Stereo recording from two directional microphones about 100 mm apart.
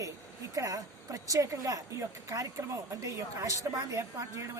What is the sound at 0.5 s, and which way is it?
A woman's voice, 35° right (ahead or behind).